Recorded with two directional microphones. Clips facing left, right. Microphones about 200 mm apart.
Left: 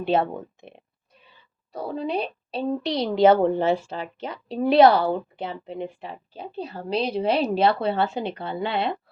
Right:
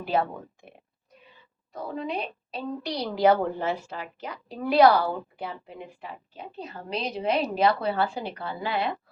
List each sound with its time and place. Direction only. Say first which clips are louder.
0.0 s a woman's voice: left 4 dB; 25° left (ahead or behind)